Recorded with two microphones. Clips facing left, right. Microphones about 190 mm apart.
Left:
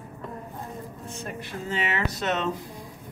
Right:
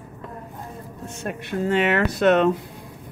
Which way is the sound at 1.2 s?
65° right (ahead or behind).